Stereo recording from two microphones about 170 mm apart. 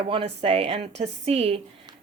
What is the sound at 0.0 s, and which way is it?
Speech, 35° right (ahead or behind).